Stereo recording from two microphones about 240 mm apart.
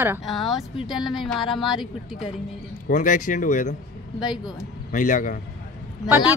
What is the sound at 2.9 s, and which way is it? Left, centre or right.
Speech, left.